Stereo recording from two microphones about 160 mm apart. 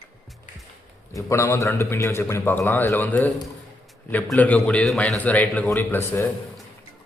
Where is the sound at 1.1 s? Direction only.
15° left (ahead or behind).